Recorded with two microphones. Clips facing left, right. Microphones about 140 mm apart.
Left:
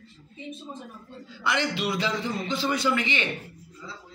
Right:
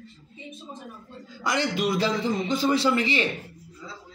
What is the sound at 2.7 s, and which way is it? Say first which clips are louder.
Speech: right 2 dB; 30° right (ahead or behind).